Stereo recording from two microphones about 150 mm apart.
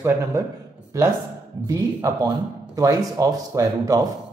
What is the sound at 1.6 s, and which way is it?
Speech, 20° right (ahead or behind).